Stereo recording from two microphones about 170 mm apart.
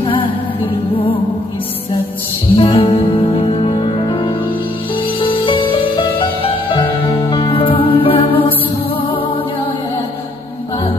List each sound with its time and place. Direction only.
2.5 s music: 30° left (ahead or behind)